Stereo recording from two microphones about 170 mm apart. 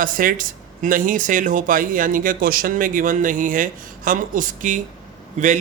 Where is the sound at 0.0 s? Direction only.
55° right (ahead or behind).